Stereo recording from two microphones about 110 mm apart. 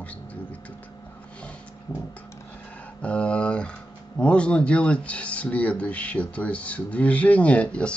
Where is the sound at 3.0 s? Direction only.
10° left (ahead or behind).